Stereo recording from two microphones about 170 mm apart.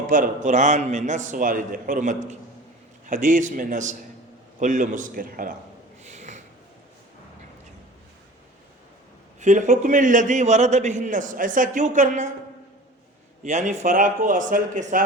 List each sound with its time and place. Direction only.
0.1 s a man's voice: 50° right (ahead or behind)
6.0 s snort: 40° right (ahead or behind)
9.4 s a man's voice: 45° right (ahead or behind)
13.4 s a man's voice: 45° right (ahead or behind)